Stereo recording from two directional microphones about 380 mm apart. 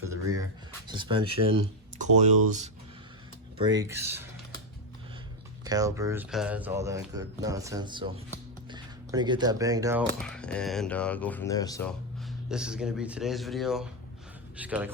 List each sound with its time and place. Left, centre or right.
0.9 s speech: centre
3.6 s speech: centre
5.6 s speech: centre